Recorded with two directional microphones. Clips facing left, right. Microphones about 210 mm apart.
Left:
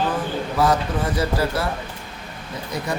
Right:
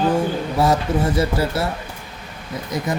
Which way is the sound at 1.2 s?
25° right (ahead or behind).